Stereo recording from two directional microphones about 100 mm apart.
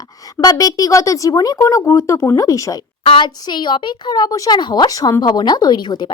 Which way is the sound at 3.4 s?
45° left (ahead or behind).